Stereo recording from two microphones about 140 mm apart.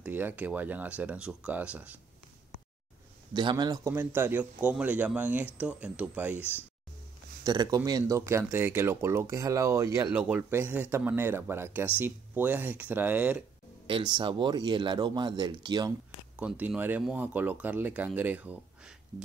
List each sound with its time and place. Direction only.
0.0 s speech: 15° right (ahead or behind)
3.3 s speech: 30° right (ahead or behind)
3.9 s speech: 15° right (ahead or behind)
7.4 s speech: 30° right (ahead or behind); by 13.4 s 10° right (ahead or behind)
13.8 s speech: 35° right (ahead or behind)
16.3 s speech: 10° right (ahead or behind)